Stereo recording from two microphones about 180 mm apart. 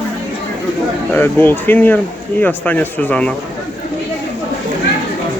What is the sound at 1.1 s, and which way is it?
Speech, 10° left (ahead or behind).